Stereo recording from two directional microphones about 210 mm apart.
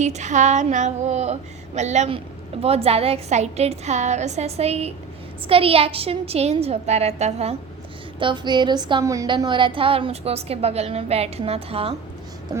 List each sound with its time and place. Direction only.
0.0 s a woman's voice: 35° right (ahead or behind)